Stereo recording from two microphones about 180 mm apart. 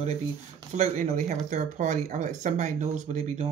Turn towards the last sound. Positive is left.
turn(degrees=-40)  # may be behind; listen again after turning